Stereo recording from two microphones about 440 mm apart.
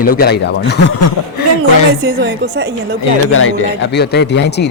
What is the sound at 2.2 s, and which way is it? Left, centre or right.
Speech, right.